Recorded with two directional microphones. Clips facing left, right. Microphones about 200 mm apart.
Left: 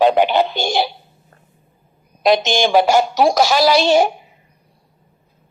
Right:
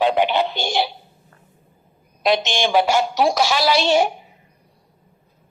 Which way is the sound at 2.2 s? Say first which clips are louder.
Left 4 dB; 40° left (ahead or behind).